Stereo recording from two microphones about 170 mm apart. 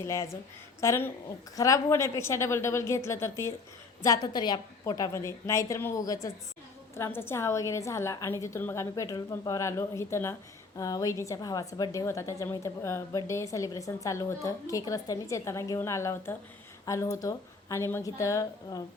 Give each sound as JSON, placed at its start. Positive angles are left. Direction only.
{"t": 0.0, "sound": "a woman's voice", "side_deg": 15}